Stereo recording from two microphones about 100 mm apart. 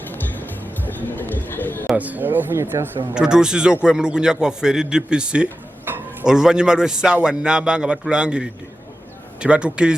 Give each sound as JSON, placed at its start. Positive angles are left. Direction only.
{"t": 0.9, "sound": "music", "side_deg": 20}
{"t": 2.0, "sound": "speech", "side_deg": -15}
{"t": 3.2, "sound": "a man's voice", "side_deg": -5}